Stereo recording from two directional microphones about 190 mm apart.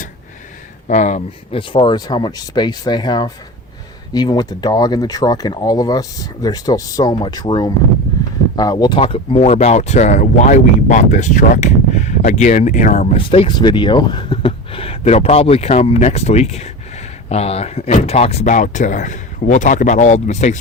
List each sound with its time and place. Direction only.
0.9 s speech: 40° left (ahead or behind)
1.7 s speech: 25° left (ahead or behind); by 13.1 s 40° left (ahead or behind)
13.1 s speech: 30° left (ahead or behind)